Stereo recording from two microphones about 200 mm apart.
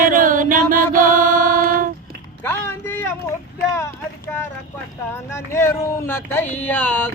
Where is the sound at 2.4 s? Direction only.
10° left (ahead or behind).